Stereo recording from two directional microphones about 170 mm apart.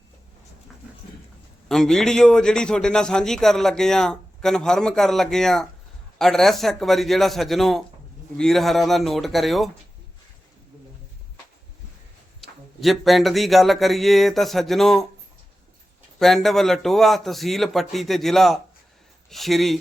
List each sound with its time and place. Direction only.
1.6 s a man's voice: centre (ahead or behind)
12.4 s a man's voice: centre (ahead or behind)
16.1 s a man's voice: centre (ahead or behind)